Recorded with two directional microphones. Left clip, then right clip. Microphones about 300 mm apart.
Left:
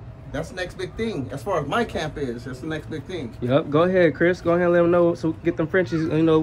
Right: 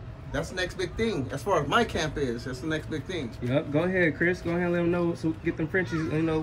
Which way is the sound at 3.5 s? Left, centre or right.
Left.